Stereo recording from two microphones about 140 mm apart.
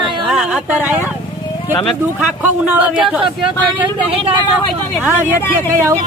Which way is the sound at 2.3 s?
10° right (ahead or behind).